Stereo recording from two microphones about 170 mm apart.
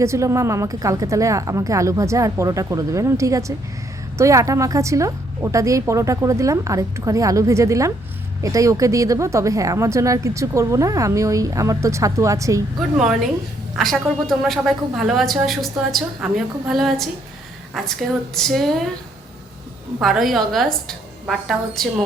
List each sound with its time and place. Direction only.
0.0 s speech: 15° right (ahead or behind)
13.7 s a woman's voice: centre (ahead or behind)
20.0 s a woman's voice: centre (ahead or behind)